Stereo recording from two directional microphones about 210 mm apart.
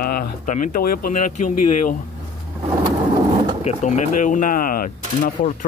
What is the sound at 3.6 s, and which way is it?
Speech, 35° left (ahead or behind).